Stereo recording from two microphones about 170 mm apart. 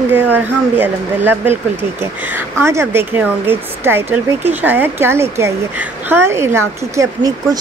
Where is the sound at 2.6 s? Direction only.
15° right (ahead or behind).